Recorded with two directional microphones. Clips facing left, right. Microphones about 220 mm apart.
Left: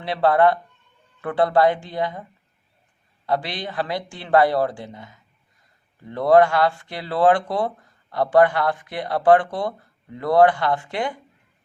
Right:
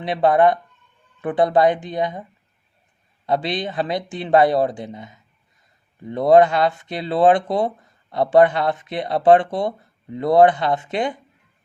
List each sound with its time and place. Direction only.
0.0 s speech: 20° right (ahead or behind)
3.2 s speech: 20° right (ahead or behind)